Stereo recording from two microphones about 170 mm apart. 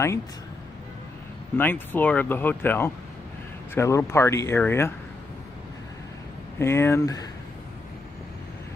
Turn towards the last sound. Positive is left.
turn(degrees=20)  # may be behind; listen again after turning